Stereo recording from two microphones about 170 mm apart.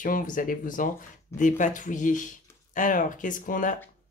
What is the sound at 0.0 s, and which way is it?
Speech, 55° left (ahead or behind).